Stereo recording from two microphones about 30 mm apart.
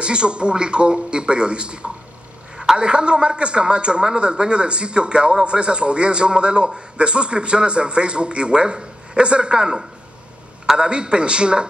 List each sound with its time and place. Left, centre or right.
0.0 s a man's voice: right
10.8 s a man's voice: right